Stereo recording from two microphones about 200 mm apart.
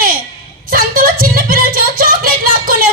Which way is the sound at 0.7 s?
45° right (ahead or behind).